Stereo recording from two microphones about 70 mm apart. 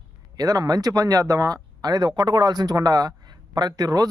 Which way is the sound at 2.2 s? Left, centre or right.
Right.